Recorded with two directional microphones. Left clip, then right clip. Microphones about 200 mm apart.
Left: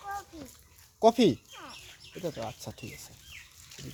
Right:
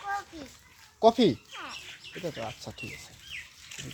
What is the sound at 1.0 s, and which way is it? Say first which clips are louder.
Speech: right 1 dB; 10° left (ahead or behind).